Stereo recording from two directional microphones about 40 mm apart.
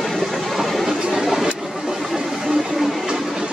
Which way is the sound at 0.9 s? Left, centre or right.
Centre.